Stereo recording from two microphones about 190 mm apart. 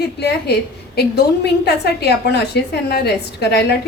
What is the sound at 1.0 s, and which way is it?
A woman's voice, 60° left (ahead or behind).